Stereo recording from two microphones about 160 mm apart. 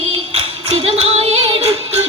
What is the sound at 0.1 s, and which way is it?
Music, 40° right (ahead or behind).